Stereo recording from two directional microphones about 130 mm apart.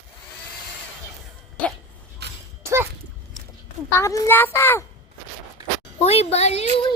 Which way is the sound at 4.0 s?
20° left (ahead or behind).